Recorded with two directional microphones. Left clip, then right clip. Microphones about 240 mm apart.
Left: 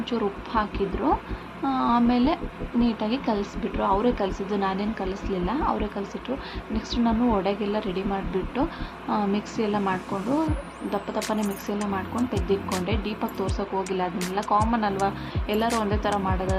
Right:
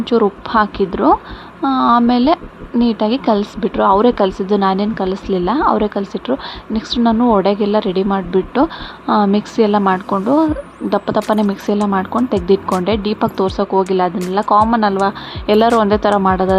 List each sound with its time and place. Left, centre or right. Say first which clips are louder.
0.0 s speech: right 13 dB; right